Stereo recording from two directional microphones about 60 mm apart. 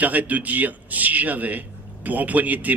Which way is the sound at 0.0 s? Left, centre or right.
Right.